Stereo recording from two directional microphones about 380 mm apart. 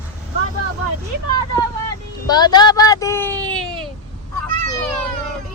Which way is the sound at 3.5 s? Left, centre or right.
Centre.